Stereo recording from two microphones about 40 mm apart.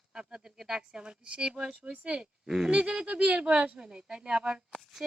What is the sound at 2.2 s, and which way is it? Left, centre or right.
Speech, centre.